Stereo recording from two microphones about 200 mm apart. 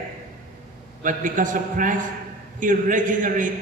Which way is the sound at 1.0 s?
40° right (ahead or behind).